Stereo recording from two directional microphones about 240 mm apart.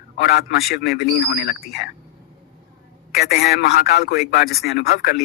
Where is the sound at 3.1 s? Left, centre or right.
Left.